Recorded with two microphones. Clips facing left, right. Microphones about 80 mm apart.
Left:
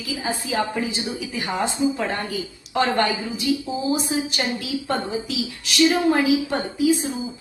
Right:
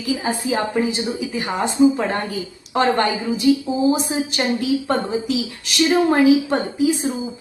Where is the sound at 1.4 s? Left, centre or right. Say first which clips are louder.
Right 6 dB; right.